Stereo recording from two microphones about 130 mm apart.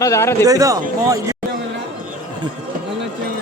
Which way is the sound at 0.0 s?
20° left (ahead or behind).